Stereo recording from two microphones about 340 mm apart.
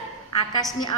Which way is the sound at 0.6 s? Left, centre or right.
Centre.